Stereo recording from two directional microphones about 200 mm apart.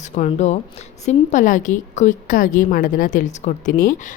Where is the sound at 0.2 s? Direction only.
35° left (ahead or behind).